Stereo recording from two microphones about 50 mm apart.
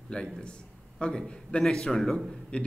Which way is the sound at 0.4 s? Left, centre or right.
Centre.